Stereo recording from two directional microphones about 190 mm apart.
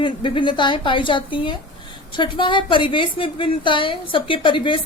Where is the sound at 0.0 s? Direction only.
25° left (ahead or behind).